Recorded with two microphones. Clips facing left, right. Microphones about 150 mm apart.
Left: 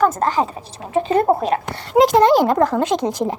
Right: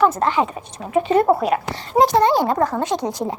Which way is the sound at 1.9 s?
90° left.